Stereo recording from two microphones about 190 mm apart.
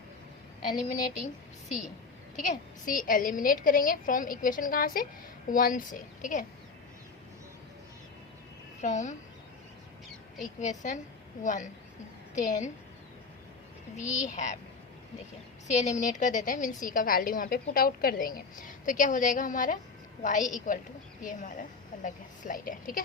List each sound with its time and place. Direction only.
2.4 s a woman's voice: 45° left (ahead or behind)
8.8 s a woman's voice: 40° left (ahead or behind)
10.4 s a woman's voice: 40° left (ahead or behind)
13.9 s a woman's voice: 40° left (ahead or behind)
15.6 s a woman's voice: 40° left (ahead or behind)